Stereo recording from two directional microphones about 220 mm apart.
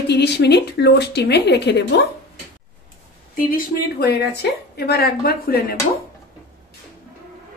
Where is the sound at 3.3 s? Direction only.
40° left (ahead or behind).